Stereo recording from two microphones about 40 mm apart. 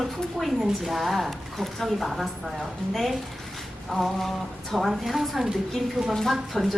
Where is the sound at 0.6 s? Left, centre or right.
Centre.